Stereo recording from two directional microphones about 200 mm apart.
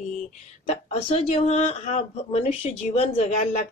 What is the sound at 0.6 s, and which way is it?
A woman's voice, 30° left (ahead or behind).